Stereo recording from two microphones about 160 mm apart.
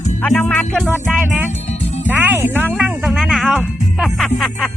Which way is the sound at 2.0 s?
10° right (ahead or behind).